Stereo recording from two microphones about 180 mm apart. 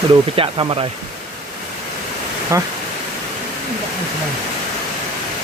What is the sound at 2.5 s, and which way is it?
Speech, 15° right (ahead or behind).